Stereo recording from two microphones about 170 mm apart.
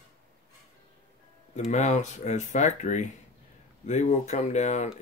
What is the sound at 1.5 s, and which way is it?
Speech, 45° left (ahead or behind).